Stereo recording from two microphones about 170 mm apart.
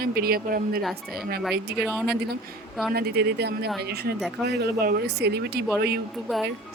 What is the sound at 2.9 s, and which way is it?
Speech, 70° right (ahead or behind).